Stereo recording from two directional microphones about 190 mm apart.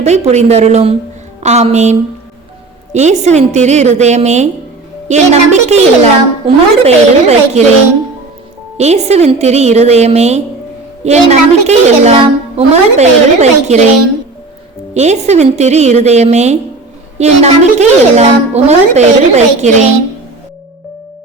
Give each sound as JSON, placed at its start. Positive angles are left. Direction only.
{"t": 0.0, "sound": "speech", "side_deg": -35}
{"t": 8.8, "sound": "speech", "side_deg": -35}
{"t": 14.9, "sound": "speech", "side_deg": -35}